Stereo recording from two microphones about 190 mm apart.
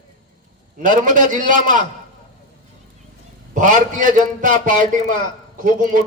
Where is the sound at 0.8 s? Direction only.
45° right (ahead or behind).